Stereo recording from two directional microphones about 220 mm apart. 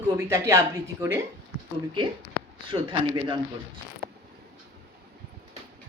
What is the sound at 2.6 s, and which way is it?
Speech, 20° right (ahead or behind).